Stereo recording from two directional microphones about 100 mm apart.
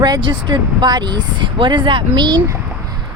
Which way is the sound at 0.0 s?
50° right (ahead or behind).